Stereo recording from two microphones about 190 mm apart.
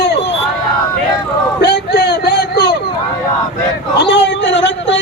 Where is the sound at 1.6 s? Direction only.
60° left (ahead or behind).